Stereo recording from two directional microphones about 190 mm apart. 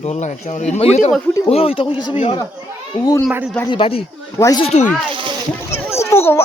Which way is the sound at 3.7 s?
30° left (ahead or behind).